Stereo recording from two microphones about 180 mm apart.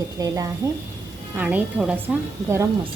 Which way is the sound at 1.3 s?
10° right (ahead or behind).